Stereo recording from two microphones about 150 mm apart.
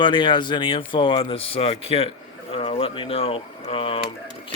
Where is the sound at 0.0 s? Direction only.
35° left (ahead or behind).